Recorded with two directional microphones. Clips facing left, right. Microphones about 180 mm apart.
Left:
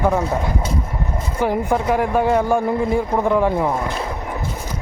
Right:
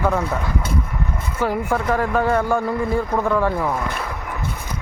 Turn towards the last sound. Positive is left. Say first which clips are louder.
# left 3 dB
turn(degrees=20)  # may be behind; listen again after turning